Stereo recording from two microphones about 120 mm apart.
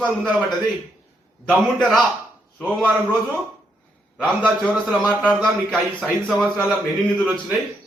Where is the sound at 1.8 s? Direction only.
5° left (ahead or behind).